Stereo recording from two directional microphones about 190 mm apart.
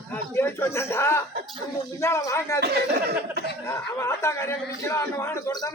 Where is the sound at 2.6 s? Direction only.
55° right (ahead or behind).